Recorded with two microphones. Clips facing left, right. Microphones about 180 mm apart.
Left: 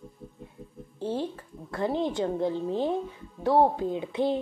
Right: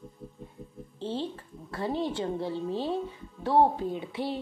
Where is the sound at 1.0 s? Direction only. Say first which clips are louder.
Left 3 dB; 15° left (ahead or behind).